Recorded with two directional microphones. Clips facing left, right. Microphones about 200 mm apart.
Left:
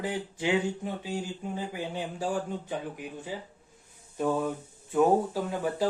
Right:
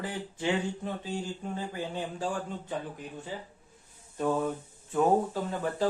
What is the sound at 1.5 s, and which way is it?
Speech, 10° left (ahead or behind).